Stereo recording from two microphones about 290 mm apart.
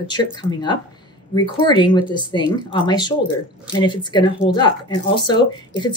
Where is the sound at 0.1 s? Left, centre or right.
Centre.